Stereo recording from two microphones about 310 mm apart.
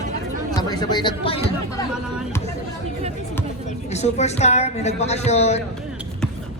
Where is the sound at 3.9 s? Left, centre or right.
Left.